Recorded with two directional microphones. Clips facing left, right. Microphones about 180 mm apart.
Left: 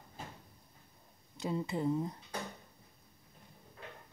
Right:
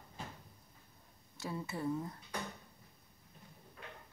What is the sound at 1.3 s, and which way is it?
Speech, 20° left (ahead or behind).